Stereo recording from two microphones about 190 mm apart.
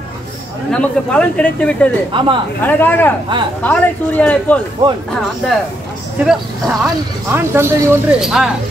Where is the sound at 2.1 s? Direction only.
25° right (ahead or behind).